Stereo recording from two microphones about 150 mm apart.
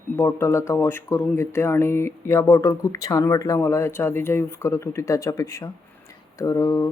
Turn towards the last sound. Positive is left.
turn(degrees=20)  # may be behind; listen again after turning